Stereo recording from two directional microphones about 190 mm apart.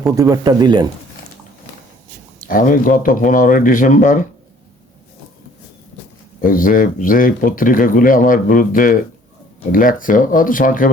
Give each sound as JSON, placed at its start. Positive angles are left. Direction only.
{"t": 0.0, "sound": "speech", "side_deg": -20}
{"t": 2.5, "sound": "speech", "side_deg": 45}
{"t": 6.4, "sound": "speech", "side_deg": 45}